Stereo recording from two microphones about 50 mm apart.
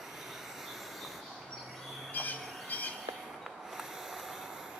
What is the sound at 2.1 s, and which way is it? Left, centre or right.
Bird, left.